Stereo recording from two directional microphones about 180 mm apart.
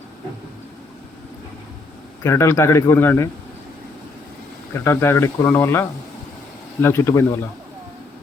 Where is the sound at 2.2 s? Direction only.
15° left (ahead or behind).